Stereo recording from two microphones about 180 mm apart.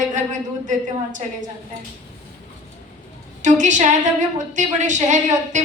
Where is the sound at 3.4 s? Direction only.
45° right (ahead or behind).